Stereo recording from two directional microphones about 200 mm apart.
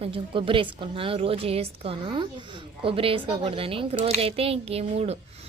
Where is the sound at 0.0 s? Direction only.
25° right (ahead or behind).